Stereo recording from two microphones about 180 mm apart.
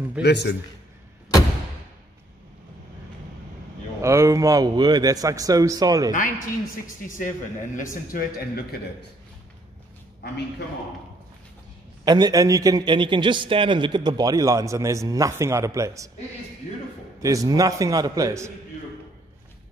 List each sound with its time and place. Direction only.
0.2 s a man's voice: 70° left (ahead or behind)
4.0 s a man's voice: 15° right (ahead or behind)
7.2 s a man's voice: 45° left (ahead or behind)
12.0 s a man's voice: 20° right (ahead or behind)
17.2 s a man's voice: 20° right (ahead or behind)